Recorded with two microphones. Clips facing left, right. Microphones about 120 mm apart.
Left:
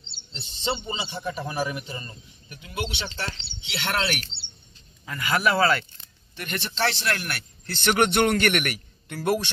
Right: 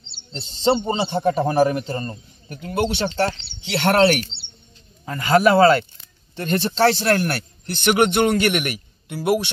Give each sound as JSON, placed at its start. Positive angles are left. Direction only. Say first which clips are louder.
{"t": 0.3, "sound": "a man's voice", "louder": "right 10 dB", "side_deg": -45}
{"t": 5.0, "sound": "speech", "louder": "right 8 dB", "side_deg": -35}
{"t": 7.6, "sound": "a man's voice", "louder": "right 4 dB", "side_deg": -15}